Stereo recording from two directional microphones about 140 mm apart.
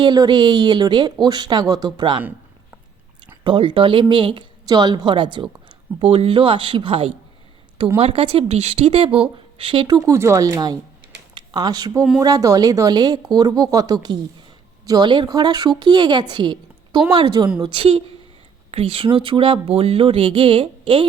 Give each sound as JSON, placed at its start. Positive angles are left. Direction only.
{"t": 0.0, "sound": "a woman's voice", "side_deg": -30}
{"t": 3.4, "sound": "a woman's voice", "side_deg": -35}
{"t": 10.0, "sound": "a woman's voice", "side_deg": -20}